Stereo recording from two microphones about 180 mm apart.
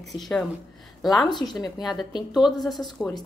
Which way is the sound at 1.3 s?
25° left (ahead or behind).